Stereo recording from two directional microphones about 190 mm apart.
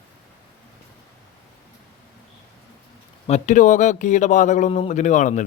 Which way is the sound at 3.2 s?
35° left (ahead or behind).